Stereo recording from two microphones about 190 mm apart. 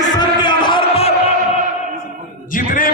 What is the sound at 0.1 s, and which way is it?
Music, 25° left (ahead or behind).